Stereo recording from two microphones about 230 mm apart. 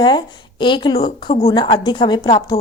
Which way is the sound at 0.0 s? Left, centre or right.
Centre.